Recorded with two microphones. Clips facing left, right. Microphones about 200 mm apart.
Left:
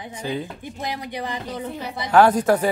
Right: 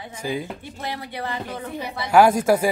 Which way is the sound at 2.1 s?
10° right (ahead or behind).